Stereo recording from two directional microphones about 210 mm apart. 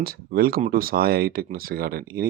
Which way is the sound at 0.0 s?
45° right (ahead or behind).